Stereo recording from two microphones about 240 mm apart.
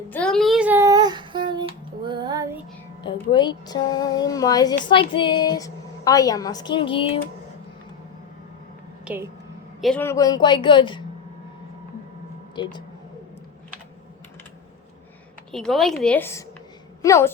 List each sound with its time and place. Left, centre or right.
0.1 s child singing: centre
3.0 s a woman's voice: centre
9.0 s a woman's voice: centre
9.8 s speech: centre
12.6 s a woman's voice: centre
15.5 s a woman's voice: centre